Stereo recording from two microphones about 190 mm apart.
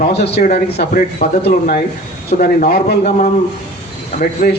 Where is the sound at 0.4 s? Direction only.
40° left (ahead or behind).